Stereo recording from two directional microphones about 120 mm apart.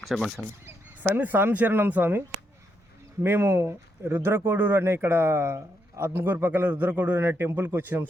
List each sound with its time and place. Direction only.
0.1 s speech: centre (ahead or behind)
0.6 s speech: 20° right (ahead or behind)
3.2 s speech: 20° right (ahead or behind)